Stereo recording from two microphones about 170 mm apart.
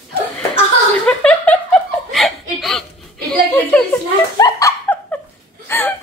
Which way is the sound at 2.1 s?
Centre (ahead or behind).